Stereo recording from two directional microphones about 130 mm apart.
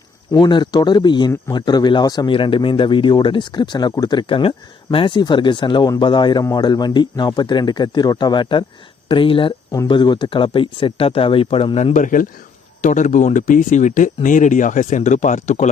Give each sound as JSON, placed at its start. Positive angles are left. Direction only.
{"t": 0.3, "sound": "speech", "side_deg": 35}
{"t": 11.9, "sound": "speech", "side_deg": 90}
{"t": 12.8, "sound": "speech", "side_deg": 70}